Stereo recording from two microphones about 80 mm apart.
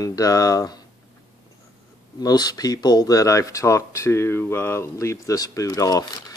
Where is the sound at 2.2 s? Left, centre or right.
Left.